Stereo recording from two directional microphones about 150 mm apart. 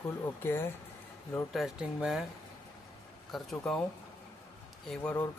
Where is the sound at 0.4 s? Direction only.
15° left (ahead or behind).